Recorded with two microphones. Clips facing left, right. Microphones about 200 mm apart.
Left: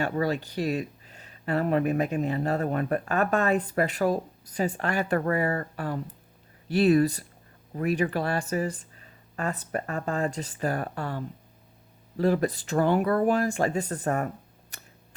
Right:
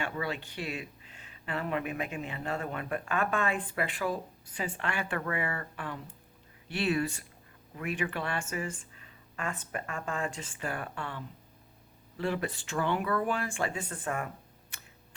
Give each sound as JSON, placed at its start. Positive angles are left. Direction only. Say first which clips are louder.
{"t": 0.0, "sound": "speech", "louder": "left 8 dB", "side_deg": 40}
{"t": 14.7, "sound": "tick", "louder": "left 4 dB", "side_deg": 40}